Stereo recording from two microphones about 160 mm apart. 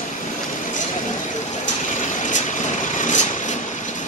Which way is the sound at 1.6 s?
50° left (ahead or behind).